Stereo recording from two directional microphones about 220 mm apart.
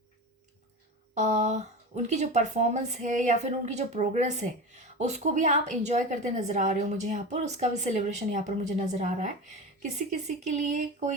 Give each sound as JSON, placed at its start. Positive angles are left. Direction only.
{"t": 1.1, "sound": "a woman's voice", "side_deg": -30}